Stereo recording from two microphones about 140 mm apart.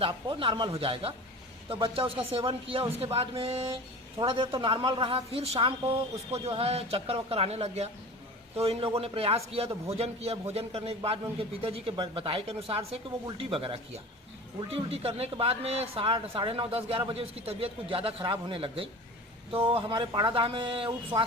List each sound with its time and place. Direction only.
0.0 s a woman's voice: 40° right (ahead or behind)